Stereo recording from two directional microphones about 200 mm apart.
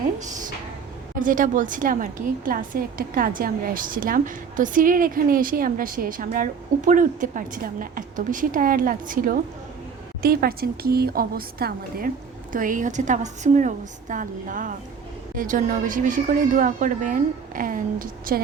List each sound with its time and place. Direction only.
1.2 s a woman's voice: 40° right (ahead or behind)